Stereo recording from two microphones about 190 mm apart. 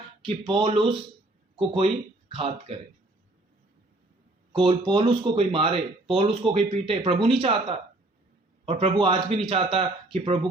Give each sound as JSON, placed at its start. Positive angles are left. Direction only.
{"t": 0.3, "sound": "speech", "side_deg": -30}
{"t": 4.5, "sound": "speech", "side_deg": -30}